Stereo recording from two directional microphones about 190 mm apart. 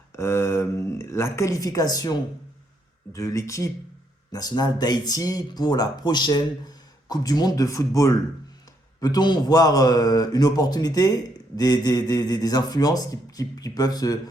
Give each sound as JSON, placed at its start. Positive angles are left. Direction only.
{"t": 0.2, "sound": "a man's voice", "side_deg": 15}